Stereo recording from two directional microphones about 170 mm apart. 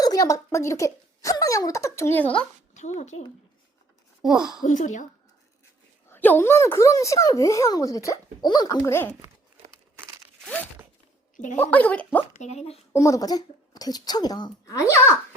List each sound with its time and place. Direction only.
0.0 s speech: 20° left (ahead or behind)
2.7 s speech: 45° left (ahead or behind)
4.2 s a woman's voice: 5° right (ahead or behind)
4.6 s speech: 45° left (ahead or behind)
6.1 s a child's voice: 10° left (ahead or behind)
11.5 s speech: 10° left (ahead or behind)
12.4 s speech: 40° left (ahead or behind)
12.9 s a child's voice: 20° left (ahead or behind)